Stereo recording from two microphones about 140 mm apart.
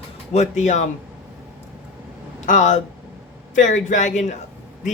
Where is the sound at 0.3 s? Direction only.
60° left (ahead or behind).